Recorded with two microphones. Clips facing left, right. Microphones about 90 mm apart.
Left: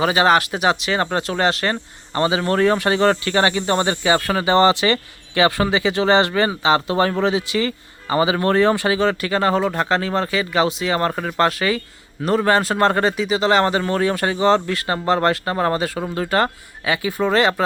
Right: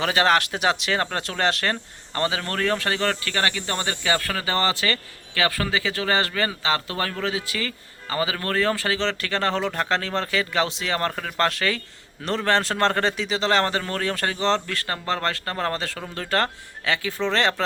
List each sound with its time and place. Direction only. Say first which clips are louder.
0.0 s speech: left 4 dB; 5° left (ahead or behind)